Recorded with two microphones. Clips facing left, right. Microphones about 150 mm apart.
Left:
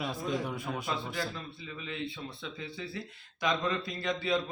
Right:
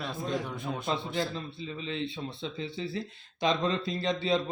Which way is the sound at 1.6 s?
30° right (ahead or behind).